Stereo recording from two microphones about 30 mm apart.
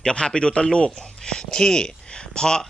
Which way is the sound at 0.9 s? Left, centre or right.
Centre.